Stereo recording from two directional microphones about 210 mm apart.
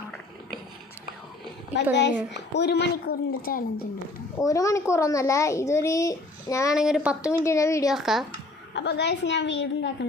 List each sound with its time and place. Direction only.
1.7 s a woman's voice: 55° left (ahead or behind)
4.4 s a child's voice: 15° left (ahead or behind)
6.7 s speech: 5° right (ahead or behind)
7.4 s a child's voice: 15° left (ahead or behind)
7.9 s speech: centre (ahead or behind)
8.7 s a woman's voice: 55° left (ahead or behind)